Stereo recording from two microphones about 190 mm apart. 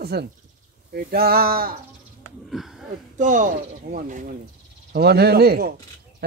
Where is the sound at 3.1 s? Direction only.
40° right (ahead or behind).